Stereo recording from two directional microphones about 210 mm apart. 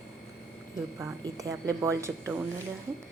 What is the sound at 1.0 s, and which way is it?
A woman's voice, 15° right (ahead or behind).